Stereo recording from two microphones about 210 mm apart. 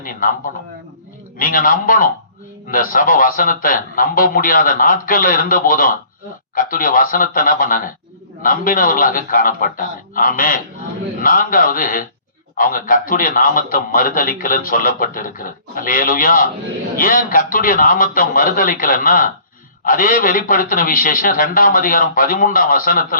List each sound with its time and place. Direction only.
1.4 s a man's voice: 40° left (ahead or behind)